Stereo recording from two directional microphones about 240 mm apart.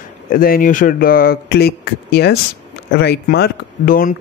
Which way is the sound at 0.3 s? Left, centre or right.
Left.